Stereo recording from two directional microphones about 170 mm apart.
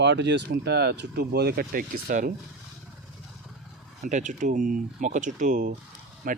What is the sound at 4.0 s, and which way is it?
Speech, 45° right (ahead or behind).